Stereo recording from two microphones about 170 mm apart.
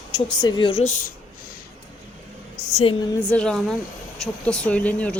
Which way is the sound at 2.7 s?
30° left (ahead or behind).